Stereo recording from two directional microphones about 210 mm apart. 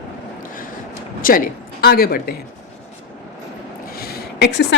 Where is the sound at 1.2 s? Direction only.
40° left (ahead or behind).